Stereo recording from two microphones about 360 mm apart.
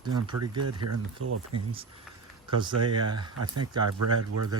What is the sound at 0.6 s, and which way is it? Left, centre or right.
Speech, right.